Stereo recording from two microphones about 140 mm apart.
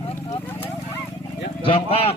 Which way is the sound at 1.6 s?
40° left (ahead or behind).